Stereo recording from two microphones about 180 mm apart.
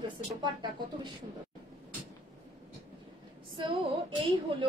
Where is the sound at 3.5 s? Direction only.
30° right (ahead or behind).